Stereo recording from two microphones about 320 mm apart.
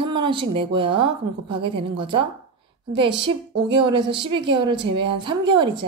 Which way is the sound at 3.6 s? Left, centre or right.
Centre.